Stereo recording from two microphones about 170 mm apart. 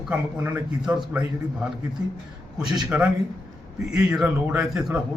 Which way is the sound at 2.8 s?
5° right (ahead or behind).